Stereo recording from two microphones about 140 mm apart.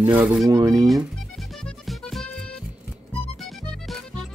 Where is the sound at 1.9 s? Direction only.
Centre (ahead or behind).